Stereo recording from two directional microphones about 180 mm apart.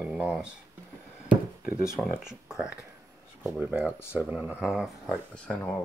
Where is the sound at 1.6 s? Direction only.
50° left (ahead or behind).